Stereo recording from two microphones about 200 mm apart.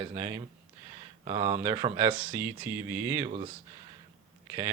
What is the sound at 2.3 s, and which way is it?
Speech, 10° right (ahead or behind).